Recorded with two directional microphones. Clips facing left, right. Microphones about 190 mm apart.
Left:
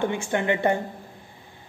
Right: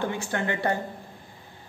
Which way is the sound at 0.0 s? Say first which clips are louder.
Left 4 dB; 20° left (ahead or behind).